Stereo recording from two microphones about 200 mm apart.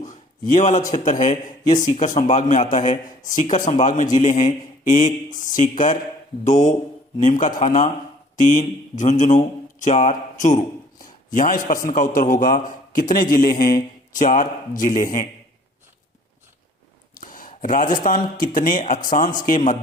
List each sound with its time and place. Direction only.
0.0 s a man's voice: 40° left (ahead or behind)
17.2 s a man's voice: 45° left (ahead or behind)